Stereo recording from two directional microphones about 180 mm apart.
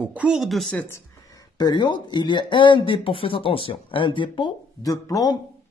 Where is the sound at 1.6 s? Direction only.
25° left (ahead or behind).